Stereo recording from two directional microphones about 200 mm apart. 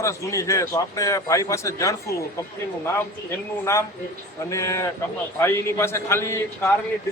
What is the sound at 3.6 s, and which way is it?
A man's voice, 15° left (ahead or behind).